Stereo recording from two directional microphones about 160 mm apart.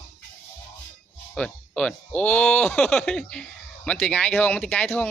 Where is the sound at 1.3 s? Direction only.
5° left (ahead or behind).